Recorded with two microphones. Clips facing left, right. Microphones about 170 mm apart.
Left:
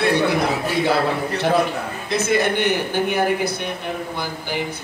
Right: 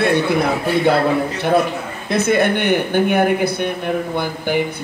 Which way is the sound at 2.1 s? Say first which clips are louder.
Right 4 dB; 55° right (ahead or behind).